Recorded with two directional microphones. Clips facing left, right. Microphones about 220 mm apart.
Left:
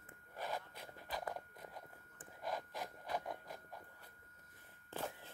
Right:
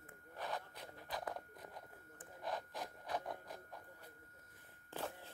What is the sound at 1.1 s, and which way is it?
Biting, centre (ahead or behind).